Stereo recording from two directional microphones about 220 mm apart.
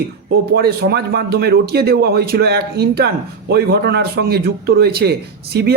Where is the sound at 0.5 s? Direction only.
45° right (ahead or behind).